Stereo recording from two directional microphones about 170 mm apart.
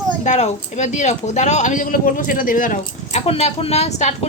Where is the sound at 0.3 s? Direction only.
40° left (ahead or behind).